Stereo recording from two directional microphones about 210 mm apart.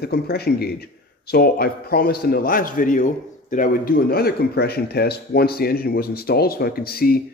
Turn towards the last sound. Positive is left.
turn(degrees=45)  # may be behind; listen again after turning